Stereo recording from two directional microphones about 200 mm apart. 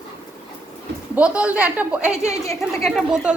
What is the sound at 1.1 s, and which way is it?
A woman's voice, 5° right (ahead or behind).